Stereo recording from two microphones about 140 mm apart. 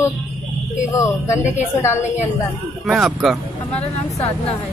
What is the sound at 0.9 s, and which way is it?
Speech, 20° left (ahead or behind).